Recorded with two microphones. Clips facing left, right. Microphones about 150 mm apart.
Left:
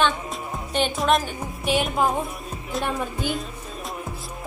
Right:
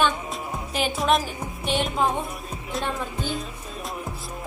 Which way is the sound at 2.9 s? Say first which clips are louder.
Left 2 dB; 15° left (ahead or behind).